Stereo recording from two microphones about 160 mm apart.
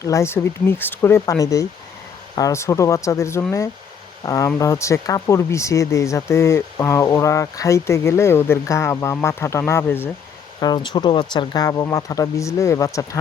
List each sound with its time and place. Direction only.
0.0 s speech: 20° left (ahead or behind)
10.6 s speech: 25° left (ahead or behind)